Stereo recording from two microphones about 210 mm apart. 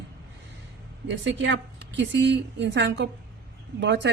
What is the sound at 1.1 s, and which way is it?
A woman's voice, 60° right (ahead or behind).